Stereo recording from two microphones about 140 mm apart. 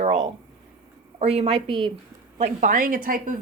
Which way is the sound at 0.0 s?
50° right (ahead or behind).